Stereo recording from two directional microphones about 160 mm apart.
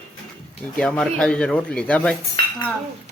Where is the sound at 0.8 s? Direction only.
5° left (ahead or behind).